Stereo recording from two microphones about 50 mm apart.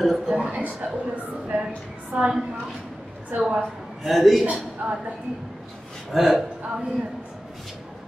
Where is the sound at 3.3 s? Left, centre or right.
Right.